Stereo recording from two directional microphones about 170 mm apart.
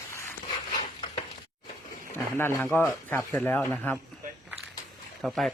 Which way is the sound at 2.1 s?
15° left (ahead or behind).